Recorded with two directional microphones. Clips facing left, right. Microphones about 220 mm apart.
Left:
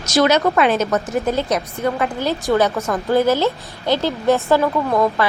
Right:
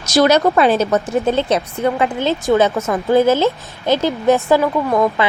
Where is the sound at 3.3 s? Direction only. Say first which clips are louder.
Right 3 dB; 20° right (ahead or behind).